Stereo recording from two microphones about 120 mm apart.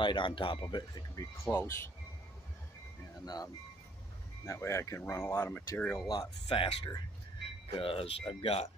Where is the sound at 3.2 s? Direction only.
35° left (ahead or behind); by 6.0 s 15° left (ahead or behind).